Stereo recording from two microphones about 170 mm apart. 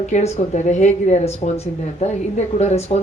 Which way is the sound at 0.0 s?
45° left (ahead or behind).